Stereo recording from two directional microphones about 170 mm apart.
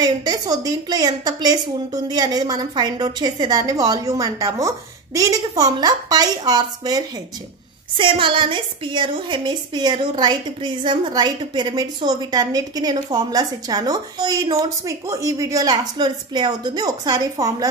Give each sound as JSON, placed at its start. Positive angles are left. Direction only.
{"t": 0.0, "sound": "a woman's voice", "side_deg": -25}